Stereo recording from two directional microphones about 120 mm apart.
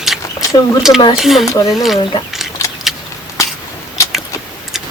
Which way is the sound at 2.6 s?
25° left (ahead or behind).